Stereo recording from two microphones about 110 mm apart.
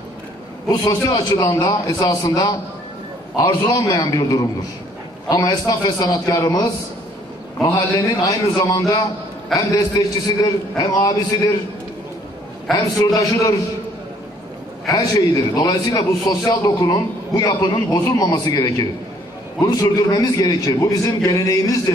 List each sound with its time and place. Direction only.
0.7 s a man's voice: 35° left (ahead or behind)
7.7 s a man's voice: 35° left (ahead or behind)
12.7 s a man's voice: 35° left (ahead or behind)
14.9 s a man's voice: 30° left (ahead or behind)